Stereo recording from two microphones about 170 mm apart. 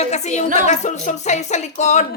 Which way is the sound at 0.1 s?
40° left (ahead or behind).